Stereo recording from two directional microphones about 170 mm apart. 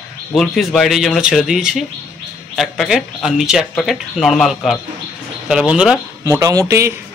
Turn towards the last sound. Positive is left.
turn(degrees=-20)  # may be behind; listen again after turning